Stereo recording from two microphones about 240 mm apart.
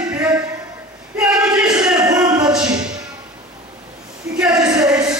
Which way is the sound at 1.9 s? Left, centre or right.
Centre.